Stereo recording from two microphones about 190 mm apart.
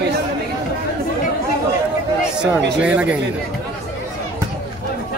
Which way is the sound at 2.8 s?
5° right (ahead or behind).